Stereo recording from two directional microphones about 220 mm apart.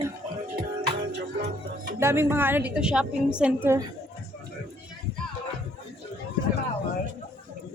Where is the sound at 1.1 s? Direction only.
50° right (ahead or behind).